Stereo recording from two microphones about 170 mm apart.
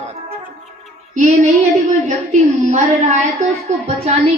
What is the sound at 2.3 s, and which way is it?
A woman's voice, 45° right (ahead or behind).